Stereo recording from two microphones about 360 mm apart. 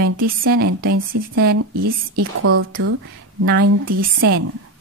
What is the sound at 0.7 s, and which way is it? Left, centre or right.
A woman's voice, right.